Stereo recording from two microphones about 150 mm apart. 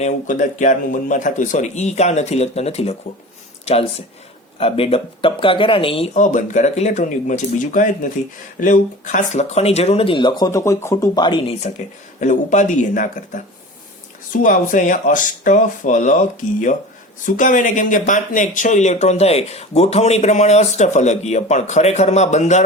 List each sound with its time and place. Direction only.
0.0 s speech: 55° left (ahead or behind)
4.5 s speech: 40° left (ahead or behind)
6.1 s speech: 55° left (ahead or behind); by 11.5 s 30° left (ahead or behind)
12.2 s speech: 55° left (ahead or behind)
14.4 s speech: 60° left (ahead or behind)